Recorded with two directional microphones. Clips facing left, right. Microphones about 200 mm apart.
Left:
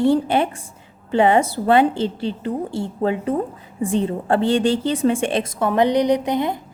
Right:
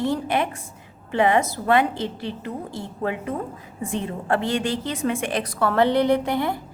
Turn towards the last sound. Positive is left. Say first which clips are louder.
# left 2 dB
turn(degrees=20)  # may be behind; listen again after turning